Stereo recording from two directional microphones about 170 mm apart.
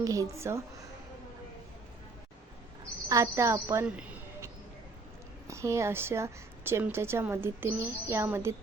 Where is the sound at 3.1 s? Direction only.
20° right (ahead or behind).